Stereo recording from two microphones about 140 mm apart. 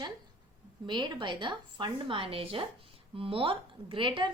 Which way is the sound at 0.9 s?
35° right (ahead or behind).